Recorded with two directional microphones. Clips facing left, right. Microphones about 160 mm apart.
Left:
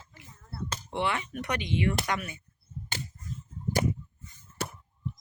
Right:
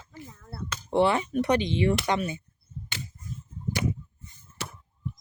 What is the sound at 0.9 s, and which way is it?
Speech, 35° right (ahead or behind).